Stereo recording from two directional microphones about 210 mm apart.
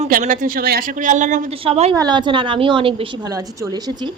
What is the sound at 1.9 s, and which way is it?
A woman's voice, 20° right (ahead or behind).